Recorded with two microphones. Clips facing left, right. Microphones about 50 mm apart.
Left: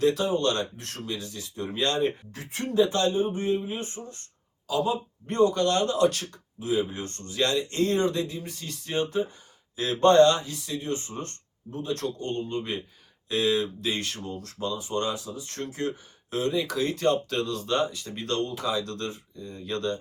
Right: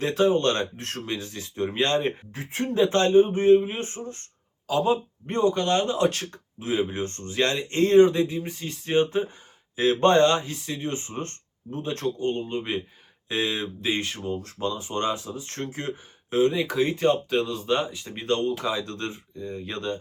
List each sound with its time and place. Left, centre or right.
0.0 s speech: right
5.3 s speech: right
12.0 s speech: centre